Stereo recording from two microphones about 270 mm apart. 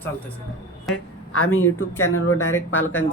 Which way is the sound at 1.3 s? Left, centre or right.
Left.